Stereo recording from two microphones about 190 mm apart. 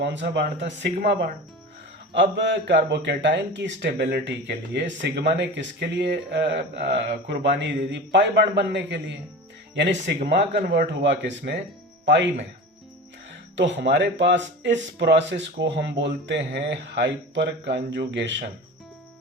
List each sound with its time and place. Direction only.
0.0 s speech: 65° right (ahead or behind)
13.6 s speech: 70° right (ahead or behind)